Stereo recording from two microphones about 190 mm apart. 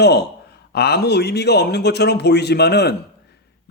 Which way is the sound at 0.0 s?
60° left (ahead or behind).